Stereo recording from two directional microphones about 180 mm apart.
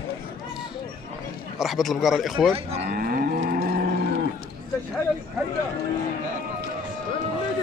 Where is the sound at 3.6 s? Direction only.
55° right (ahead or behind).